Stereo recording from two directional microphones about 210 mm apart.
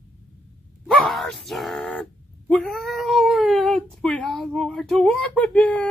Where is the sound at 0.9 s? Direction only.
Centre (ahead or behind).